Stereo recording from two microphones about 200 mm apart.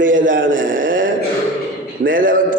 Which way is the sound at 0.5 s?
45° right (ahead or behind).